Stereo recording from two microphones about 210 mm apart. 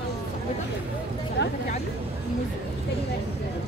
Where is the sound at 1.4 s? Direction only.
55° left (ahead or behind).